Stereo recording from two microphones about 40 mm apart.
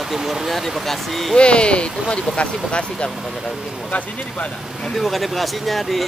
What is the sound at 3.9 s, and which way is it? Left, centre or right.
Speech, left.